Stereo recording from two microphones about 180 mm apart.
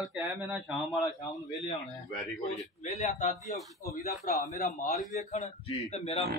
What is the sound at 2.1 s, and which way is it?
A man's voice, 40° left (ahead or behind).